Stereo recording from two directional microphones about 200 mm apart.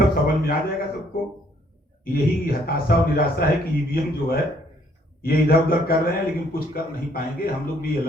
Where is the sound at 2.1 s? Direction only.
50° left (ahead or behind).